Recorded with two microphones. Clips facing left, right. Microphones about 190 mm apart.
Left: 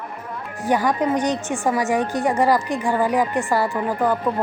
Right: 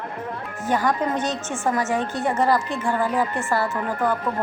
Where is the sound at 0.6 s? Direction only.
15° left (ahead or behind).